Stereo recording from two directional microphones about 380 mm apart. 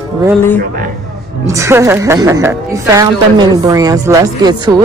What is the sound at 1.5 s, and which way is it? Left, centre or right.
A woman's voice, centre.